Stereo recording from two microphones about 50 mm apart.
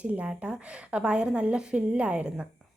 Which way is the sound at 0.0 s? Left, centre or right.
Right.